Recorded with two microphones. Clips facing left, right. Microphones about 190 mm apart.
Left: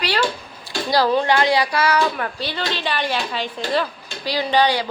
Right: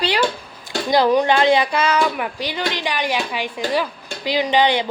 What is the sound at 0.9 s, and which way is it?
Speech, 20° right (ahead or behind).